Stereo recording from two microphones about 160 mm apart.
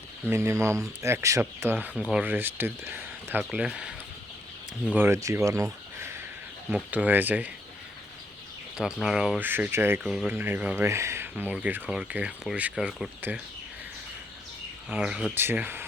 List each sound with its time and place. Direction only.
0.3 s speech: 15° right (ahead or behind)
4.9 s speech: 15° right (ahead or behind)
6.7 s speech: 10° right (ahead or behind)
8.8 s speech: centre (ahead or behind)
14.8 s speech: 5° right (ahead or behind)